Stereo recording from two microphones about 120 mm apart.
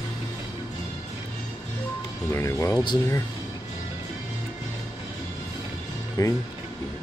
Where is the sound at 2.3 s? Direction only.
25° left (ahead or behind).